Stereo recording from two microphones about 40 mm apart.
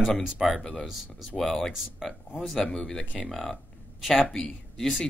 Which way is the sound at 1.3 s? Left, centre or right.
Centre.